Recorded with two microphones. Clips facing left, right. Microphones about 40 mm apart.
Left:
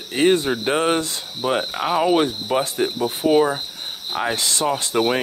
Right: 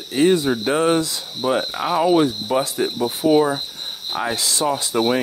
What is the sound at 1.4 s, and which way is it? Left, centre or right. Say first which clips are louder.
Speech: right 1 dB; left.